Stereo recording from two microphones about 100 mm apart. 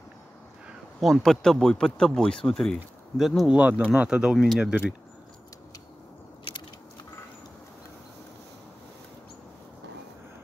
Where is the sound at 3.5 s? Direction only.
15° right (ahead or behind).